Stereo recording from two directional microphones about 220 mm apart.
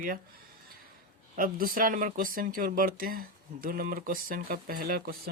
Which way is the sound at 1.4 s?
40° right (ahead or behind).